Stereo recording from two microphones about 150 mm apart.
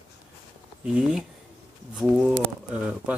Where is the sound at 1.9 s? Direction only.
5° right (ahead or behind).